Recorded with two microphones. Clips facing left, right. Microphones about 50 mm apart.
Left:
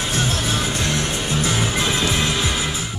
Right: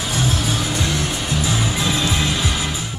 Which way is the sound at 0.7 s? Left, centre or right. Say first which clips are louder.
Even; centre.